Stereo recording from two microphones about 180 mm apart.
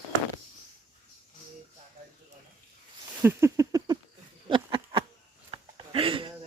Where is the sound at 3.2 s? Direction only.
15° right (ahead or behind).